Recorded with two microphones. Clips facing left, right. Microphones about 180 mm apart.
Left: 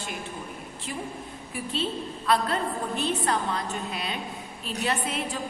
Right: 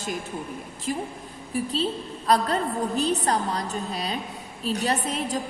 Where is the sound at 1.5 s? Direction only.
35° right (ahead or behind).